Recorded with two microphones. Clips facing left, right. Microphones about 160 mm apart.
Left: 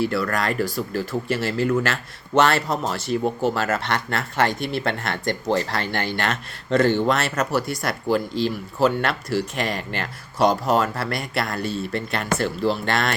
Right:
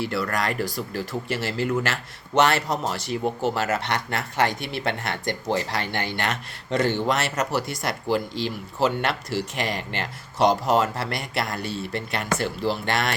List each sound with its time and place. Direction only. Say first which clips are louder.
0.0 s speech: left 3 dB; 20° right (ahead or behind)